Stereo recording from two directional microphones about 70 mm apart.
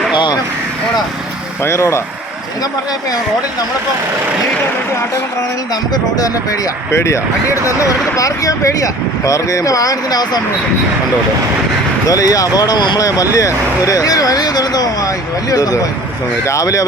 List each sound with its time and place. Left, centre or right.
1.6 s speech: left
6.9 s speech: left
7.8 s speech: left
12.0 s speech: left
13.0 s speech: left